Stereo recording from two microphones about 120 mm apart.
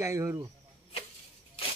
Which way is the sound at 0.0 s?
25° right (ahead or behind).